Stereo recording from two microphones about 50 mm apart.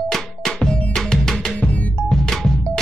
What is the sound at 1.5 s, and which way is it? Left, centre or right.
Music, left.